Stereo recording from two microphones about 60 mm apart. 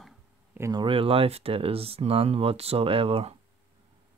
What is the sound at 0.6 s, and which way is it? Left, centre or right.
Speech, right.